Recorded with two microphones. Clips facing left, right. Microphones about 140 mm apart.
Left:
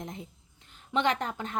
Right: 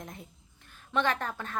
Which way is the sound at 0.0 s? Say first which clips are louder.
Left 4 dB; 20° left (ahead or behind).